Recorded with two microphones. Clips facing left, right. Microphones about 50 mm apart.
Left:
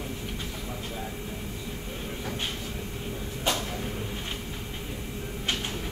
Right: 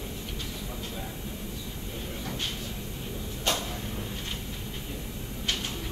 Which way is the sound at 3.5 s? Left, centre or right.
Centre.